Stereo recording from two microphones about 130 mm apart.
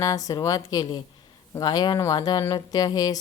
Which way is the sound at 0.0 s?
25° left (ahead or behind).